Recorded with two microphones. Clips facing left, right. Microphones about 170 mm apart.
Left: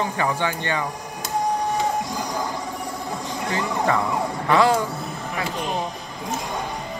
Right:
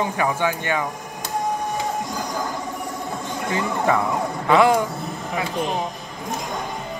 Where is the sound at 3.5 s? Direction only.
20° right (ahead or behind).